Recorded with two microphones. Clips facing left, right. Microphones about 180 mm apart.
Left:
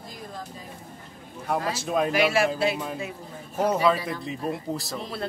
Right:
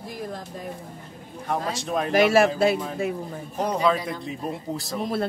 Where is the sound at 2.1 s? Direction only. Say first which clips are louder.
Right 8 dB; 45° right (ahead or behind).